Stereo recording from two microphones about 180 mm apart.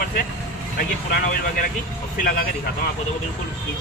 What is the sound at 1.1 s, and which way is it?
Speech, 50° left (ahead or behind).